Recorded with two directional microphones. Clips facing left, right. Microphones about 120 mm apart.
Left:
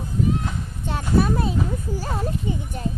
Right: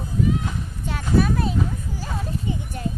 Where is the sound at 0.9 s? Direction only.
30° left (ahead or behind).